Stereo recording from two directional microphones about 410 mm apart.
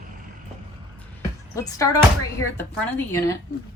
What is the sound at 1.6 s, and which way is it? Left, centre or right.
A woman's voice, centre.